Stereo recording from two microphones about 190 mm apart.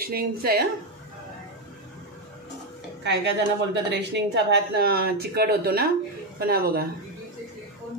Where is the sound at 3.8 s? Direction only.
60° right (ahead or behind).